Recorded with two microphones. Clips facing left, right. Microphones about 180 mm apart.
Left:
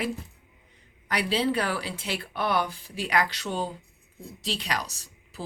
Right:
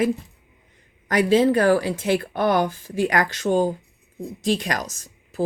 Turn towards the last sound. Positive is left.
turn(degrees=-45)  # may be behind; listen again after turning